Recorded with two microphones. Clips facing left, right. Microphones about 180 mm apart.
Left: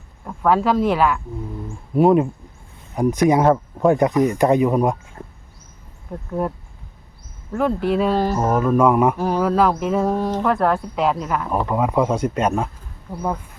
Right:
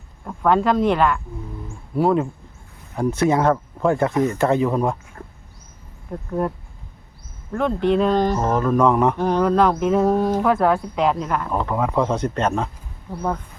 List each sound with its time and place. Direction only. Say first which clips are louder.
0.3 s speech: even; centre (ahead or behind)
2.0 s speech: left 4 dB; 20° left (ahead or behind)
5.2 s a sound: left 1 dB; 25° left (ahead or behind)
6.1 s speech: even; centre (ahead or behind)
7.5 s speech: even; 5° left (ahead or behind)
11.4 s speech: left 2 dB; 15° left (ahead or behind)